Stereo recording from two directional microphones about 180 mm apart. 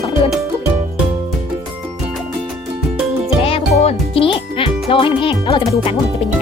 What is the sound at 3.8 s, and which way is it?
Music, 35° left (ahead or behind).